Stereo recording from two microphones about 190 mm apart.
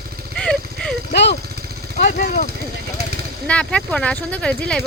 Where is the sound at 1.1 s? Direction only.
65° left (ahead or behind).